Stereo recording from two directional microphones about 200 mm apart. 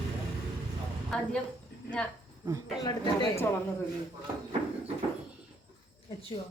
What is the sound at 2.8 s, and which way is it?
Speech, 15° left (ahead or behind).